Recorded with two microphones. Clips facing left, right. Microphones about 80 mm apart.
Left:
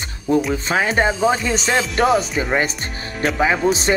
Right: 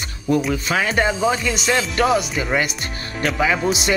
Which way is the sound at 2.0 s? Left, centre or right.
Centre.